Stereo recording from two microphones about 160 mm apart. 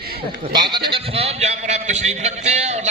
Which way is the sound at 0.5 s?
30° right (ahead or behind).